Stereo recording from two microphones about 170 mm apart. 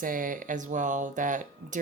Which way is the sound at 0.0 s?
50° right (ahead or behind).